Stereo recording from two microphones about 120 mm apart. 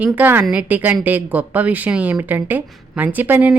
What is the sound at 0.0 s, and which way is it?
Speech, 15° right (ahead or behind).